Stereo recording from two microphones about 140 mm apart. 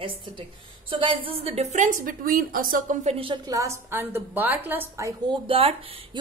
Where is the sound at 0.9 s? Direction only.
40° right (ahead or behind); by 2.9 s 80° right.